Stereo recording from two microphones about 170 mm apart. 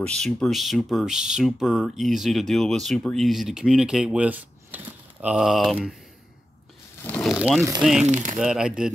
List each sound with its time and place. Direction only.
0.0 s speech: 5° left (ahead or behind)
7.0 s a sound: 10° left (ahead or behind)
7.2 s speech: 5° right (ahead or behind)
8.0 s speech: 45° right (ahead or behind)
8.4 s speech: 5° right (ahead or behind)